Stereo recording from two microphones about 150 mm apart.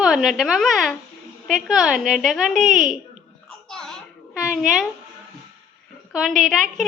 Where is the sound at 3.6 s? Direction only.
5° left (ahead or behind).